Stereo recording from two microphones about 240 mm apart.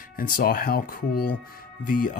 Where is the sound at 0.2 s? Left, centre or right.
Left.